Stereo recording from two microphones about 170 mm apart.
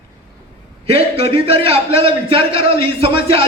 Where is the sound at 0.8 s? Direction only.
35° right (ahead or behind).